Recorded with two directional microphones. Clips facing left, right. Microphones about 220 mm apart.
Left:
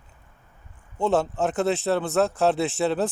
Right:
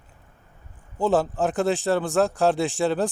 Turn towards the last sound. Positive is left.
turn(degrees=0)  # may be behind; listen again after turning